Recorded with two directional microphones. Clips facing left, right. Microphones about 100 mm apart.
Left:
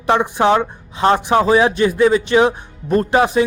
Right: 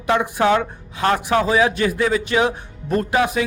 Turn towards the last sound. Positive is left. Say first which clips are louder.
# left 5 dB
turn(degrees=30)  # may be behind; listen again after turning